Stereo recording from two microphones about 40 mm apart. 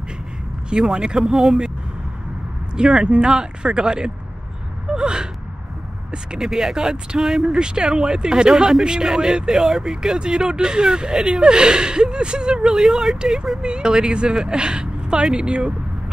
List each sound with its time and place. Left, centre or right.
0.7 s speech: centre
1.3 s speech: centre
2.7 s speech: centre
4.8 s gasp: right
6.1 s speech: centre
10.1 s speech: right
12.8 s speech: centre
13.6 s a woman's voice: right